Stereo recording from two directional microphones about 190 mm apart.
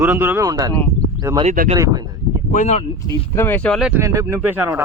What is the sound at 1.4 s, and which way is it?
Speech, 35° right (ahead or behind).